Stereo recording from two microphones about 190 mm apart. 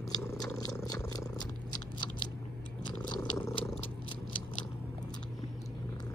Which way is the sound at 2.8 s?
20° left (ahead or behind).